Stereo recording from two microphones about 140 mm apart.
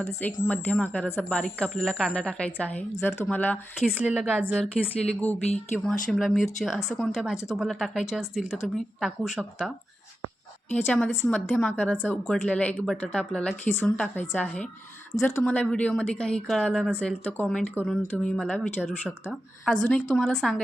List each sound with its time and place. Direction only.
0.0 s a woman's voice: 15° left (ahead or behind)
3.8 s speech: 5° right (ahead or behind)
5.8 s speech: 5° left (ahead or behind)
10.7 s a woman's voice: 10° left (ahead or behind)
16.9 s a woman's voice: 15° left (ahead or behind)